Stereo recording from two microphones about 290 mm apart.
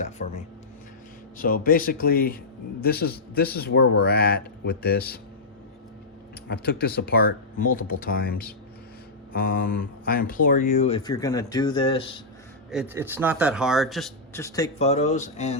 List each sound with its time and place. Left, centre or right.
0.2 s speech: left
1.4 s speech: left
6.5 s speech: left; by 12.0 s centre
12.7 s speech: centre; by 15.5 s left